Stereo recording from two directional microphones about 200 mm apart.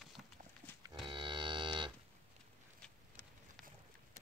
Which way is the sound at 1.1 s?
25° right (ahead or behind).